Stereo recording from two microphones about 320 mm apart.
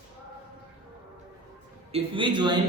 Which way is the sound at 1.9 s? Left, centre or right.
Centre.